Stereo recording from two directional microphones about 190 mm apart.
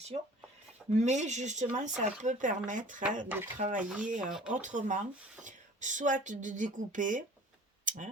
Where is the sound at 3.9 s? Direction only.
5° right (ahead or behind).